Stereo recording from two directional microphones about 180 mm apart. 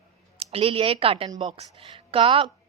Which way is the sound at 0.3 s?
30° right (ahead or behind).